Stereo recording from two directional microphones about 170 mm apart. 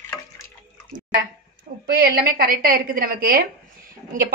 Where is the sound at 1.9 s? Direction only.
65° right (ahead or behind).